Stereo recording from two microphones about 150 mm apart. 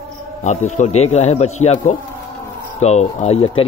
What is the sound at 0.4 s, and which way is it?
Speech, 50° left (ahead or behind).